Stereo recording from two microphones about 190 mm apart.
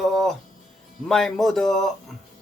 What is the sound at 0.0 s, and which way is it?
Music, centre (ahead or behind).